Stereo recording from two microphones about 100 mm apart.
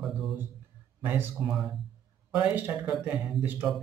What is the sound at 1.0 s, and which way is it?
Speech, 20° right (ahead or behind).